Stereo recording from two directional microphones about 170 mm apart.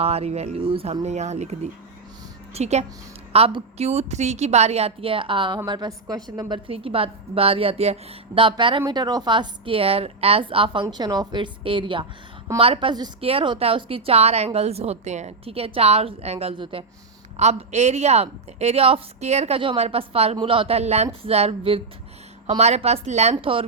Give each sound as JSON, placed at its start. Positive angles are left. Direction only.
{"t": 0.0, "sound": "a woman's voice", "side_deg": -35}